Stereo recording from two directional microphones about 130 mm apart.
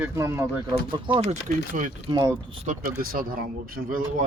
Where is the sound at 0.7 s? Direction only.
40° right (ahead or behind).